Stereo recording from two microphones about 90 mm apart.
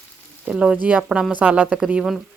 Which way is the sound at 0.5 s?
10° right (ahead or behind).